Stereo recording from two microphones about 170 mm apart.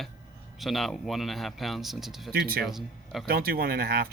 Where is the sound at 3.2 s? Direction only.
60° right (ahead or behind).